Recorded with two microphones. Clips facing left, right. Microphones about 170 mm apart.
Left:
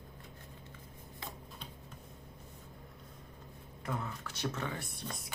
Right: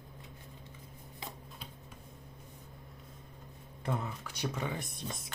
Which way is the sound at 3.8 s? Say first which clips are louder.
Right 3 dB; 25° right (ahead or behind).